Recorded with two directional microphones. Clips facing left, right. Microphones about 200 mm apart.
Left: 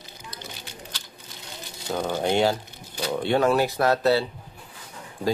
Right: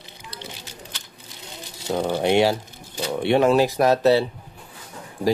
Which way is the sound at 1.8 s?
25° right (ahead or behind).